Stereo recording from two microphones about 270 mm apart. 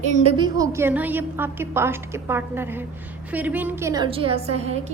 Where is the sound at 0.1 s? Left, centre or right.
Centre.